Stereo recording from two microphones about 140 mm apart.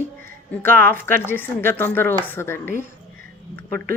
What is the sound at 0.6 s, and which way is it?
Speech, 15° left (ahead or behind).